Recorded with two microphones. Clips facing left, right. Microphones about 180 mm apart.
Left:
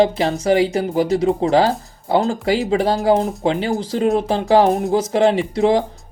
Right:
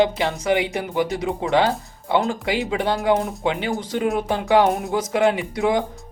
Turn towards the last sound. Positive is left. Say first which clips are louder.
# left 5 dB
turn(degrees=30)  # may be behind; listen again after turning